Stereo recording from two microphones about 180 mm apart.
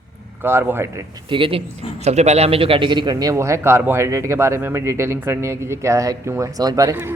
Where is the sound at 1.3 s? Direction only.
30° right (ahead or behind).